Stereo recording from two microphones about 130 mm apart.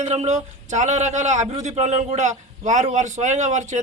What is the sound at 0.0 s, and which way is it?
A man's voice, 55° right (ahead or behind).